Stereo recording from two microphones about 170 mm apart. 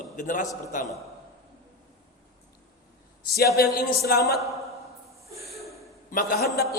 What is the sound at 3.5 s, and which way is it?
Speech, 65° left (ahead or behind).